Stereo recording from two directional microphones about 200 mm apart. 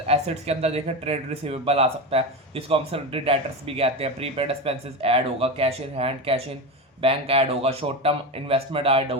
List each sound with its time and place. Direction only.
0.1 s speech: 30° right (ahead or behind)